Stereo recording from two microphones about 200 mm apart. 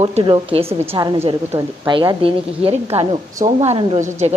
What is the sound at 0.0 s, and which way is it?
A woman's voice, 30° right (ahead or behind).